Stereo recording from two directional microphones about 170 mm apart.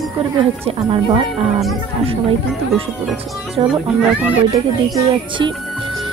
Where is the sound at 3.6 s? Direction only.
25° right (ahead or behind).